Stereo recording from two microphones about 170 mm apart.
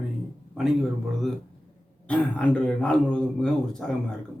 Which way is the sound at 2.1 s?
5° left (ahead or behind).